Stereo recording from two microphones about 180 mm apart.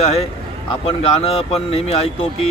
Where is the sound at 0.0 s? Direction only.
35° left (ahead or behind).